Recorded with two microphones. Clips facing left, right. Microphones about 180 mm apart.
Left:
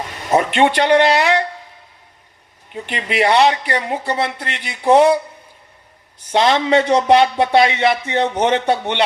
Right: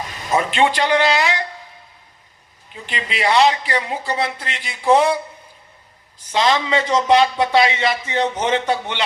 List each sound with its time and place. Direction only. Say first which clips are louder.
0.1 s speech: left 4 dB; 55° left (ahead or behind)
2.7 s speech: left 7 dB; 55° left (ahead or behind)
6.2 s speech: left 3 dB; 60° left (ahead or behind)